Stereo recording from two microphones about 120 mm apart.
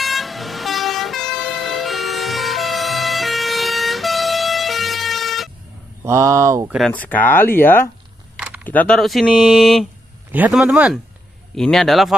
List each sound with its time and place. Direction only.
0.0 s vehicle: centre (ahead or behind)
6.0 s speech: 25° right (ahead or behind)
6.9 s speech: 15° left (ahead or behind); by 11.0 s 10° right (ahead or behind)
11.5 s speech: 5° left (ahead or behind)